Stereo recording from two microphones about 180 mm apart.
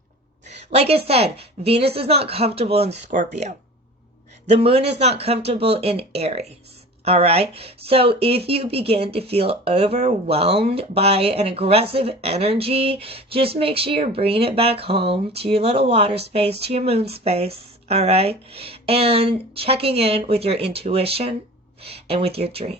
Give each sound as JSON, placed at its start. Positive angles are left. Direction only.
{"t": 0.4, "sound": "speech", "side_deg": -35}